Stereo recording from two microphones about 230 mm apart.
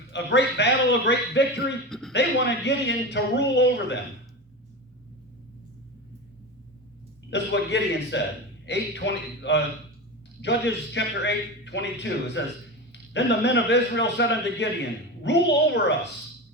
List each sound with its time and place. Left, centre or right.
0.1 s a man's voice: left
1.9 s a sound: centre
2.1 s a man's voice: left
7.3 s a man's voice: left